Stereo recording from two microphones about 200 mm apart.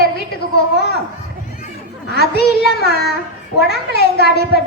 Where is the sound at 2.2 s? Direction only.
55° left (ahead or behind).